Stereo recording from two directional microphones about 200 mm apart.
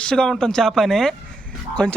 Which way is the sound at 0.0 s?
5° left (ahead or behind).